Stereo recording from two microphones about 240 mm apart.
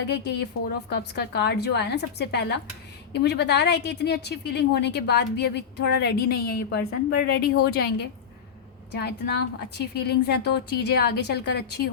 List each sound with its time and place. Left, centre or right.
0.9 s a woman's voice: left